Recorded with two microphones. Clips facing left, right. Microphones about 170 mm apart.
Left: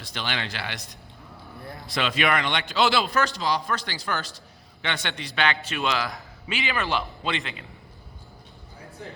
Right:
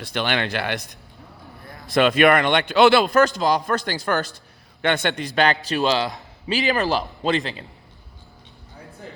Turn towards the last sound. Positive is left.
turn(degrees=-35)  # may be behind; listen again after turning